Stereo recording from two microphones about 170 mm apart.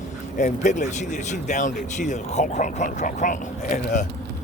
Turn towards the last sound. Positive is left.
turn(degrees=50)  # may be behind; listen again after turning